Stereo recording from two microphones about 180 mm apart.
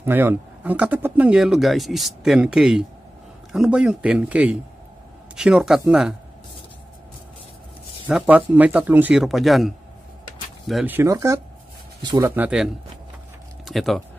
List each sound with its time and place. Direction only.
0.0 s speech: 10° right (ahead or behind)
8.1 s speech: 10° right (ahead or behind)
11.0 s speech: 15° right (ahead or behind)
12.3 s speech: 10° right (ahead or behind)
13.7 s speech: centre (ahead or behind)